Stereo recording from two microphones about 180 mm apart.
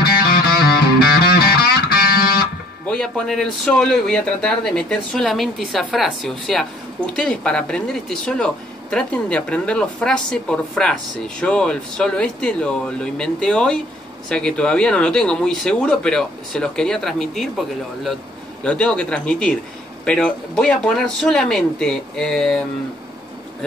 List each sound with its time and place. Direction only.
0.0 s music: 60° left (ahead or behind)
2.9 s a woman's voice: 5° left (ahead or behind)